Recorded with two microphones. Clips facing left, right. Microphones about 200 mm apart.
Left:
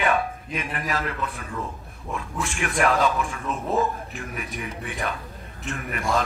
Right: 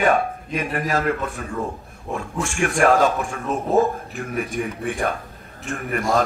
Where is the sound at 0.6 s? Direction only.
45° right (ahead or behind).